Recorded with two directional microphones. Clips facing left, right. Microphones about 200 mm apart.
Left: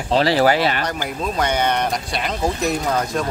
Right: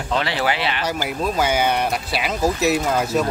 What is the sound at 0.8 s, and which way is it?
Speech, 5° right (ahead or behind).